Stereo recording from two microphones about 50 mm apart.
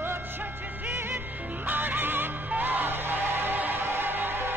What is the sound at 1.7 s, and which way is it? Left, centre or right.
Music, right.